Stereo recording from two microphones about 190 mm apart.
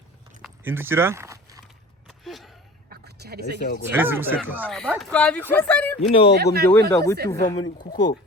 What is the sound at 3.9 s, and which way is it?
Speech, 10° right (ahead or behind).